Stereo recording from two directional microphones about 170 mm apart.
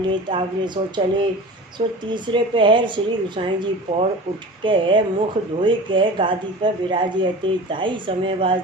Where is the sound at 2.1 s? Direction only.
30° right (ahead or behind).